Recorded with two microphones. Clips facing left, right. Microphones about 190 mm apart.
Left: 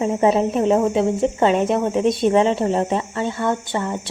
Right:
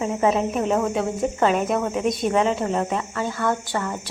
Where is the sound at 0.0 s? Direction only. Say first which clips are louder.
Left 4 dB; 30° left (ahead or behind).